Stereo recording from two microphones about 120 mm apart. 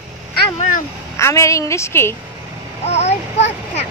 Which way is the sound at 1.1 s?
25° left (ahead or behind).